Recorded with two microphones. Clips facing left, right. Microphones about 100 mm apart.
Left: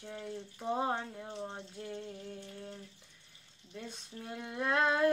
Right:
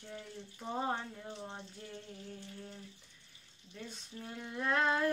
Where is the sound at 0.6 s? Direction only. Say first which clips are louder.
Left 3 dB; 10° left (ahead or behind).